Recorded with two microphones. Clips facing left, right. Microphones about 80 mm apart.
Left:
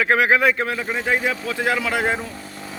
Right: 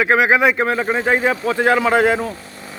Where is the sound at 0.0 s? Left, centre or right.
Centre.